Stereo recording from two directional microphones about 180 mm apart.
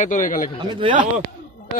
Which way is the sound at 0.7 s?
25° right (ahead or behind).